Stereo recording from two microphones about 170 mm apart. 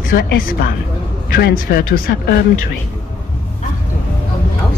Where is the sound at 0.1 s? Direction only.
55° left (ahead or behind).